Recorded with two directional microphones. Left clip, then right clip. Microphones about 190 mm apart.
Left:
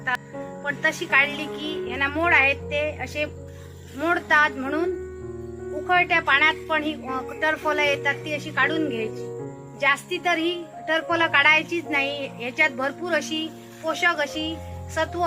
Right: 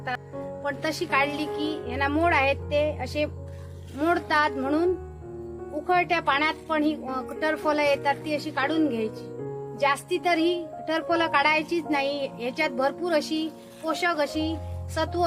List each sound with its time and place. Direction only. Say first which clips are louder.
0.7 s a woman's voice: left 5 dB; 60° right (ahead or behind)
5.9 s a woman's voice: left 4 dB; 60° right (ahead or behind)